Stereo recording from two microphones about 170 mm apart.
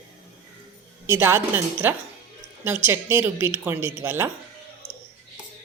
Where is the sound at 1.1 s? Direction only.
15° right (ahead or behind).